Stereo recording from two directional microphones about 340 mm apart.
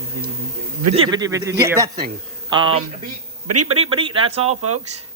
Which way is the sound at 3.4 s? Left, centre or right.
Right.